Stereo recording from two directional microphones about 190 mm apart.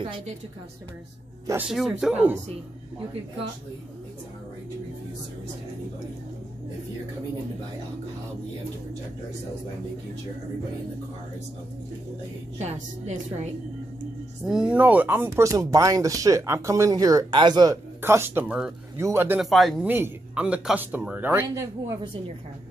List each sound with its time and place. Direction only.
1.7 s speech: centre (ahead or behind)
12.5 s a woman's voice: 35° right (ahead or behind)
14.5 s speech: 5° right (ahead or behind)
19.4 s speech: centre (ahead or behind); by 22.2 s 20° right (ahead or behind)